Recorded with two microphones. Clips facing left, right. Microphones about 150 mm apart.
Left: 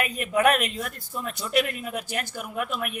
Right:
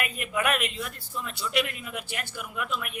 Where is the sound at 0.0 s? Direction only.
40° left (ahead or behind).